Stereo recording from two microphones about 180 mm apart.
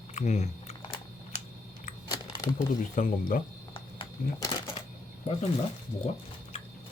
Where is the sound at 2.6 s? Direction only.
45° left (ahead or behind).